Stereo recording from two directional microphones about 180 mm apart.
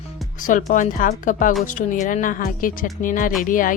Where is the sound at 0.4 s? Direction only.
45° left (ahead or behind).